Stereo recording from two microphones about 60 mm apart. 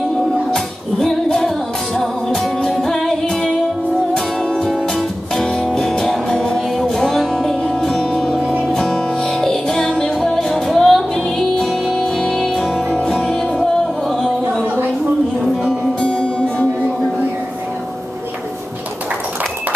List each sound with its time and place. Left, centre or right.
0.5 s music: centre
15.6 s music: centre